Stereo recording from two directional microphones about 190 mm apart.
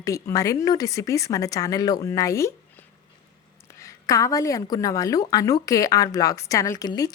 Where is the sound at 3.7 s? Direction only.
15° left (ahead or behind).